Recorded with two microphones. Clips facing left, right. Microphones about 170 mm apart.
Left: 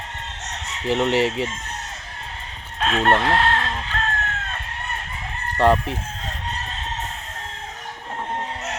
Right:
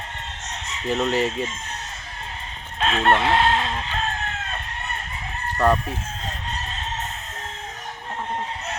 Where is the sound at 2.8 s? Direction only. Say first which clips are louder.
Left 1 dB; centre (ahead or behind).